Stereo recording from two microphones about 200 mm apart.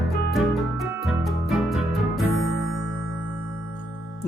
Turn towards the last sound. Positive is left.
turn(degrees=70)  # may be behind; listen again after turning